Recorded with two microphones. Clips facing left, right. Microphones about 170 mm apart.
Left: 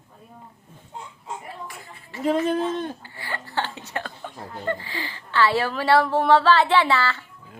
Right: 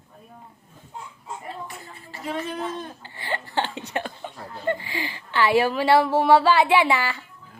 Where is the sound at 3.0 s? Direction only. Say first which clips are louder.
Right 3 dB; 20° right (ahead or behind).